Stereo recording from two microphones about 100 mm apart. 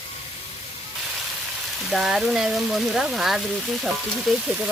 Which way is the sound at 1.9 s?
Centre (ahead or behind).